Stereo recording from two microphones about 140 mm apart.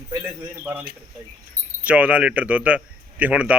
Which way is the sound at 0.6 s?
10° right (ahead or behind).